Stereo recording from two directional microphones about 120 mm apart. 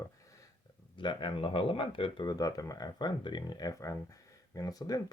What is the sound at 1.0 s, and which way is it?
Speech, 40° left (ahead or behind).